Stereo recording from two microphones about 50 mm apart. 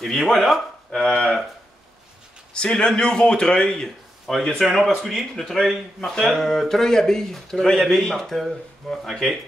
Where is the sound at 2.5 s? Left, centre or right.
Centre.